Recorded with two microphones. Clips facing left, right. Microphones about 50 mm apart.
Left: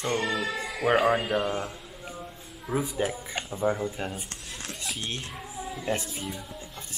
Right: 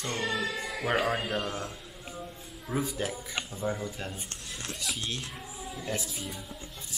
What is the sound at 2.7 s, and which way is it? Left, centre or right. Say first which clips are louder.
Speech: left 4 dB; centre.